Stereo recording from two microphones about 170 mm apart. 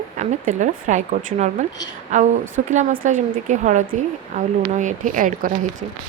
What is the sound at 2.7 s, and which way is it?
A woman's voice, 45° right (ahead or behind).